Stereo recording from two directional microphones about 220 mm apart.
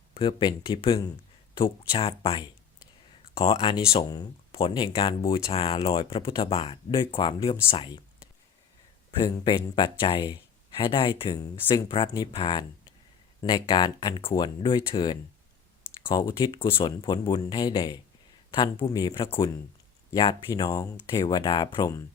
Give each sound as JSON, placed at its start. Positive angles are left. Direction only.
{"t": 0.1, "sound": "speech", "side_deg": 20}
{"t": 9.1, "sound": "speech", "side_deg": 20}